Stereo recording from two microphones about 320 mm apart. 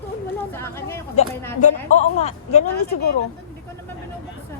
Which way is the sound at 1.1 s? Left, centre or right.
Left.